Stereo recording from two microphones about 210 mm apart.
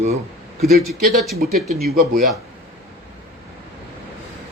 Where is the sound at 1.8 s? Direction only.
45° right (ahead or behind).